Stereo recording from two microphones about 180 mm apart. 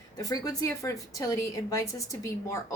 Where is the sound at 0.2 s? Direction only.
20° left (ahead or behind).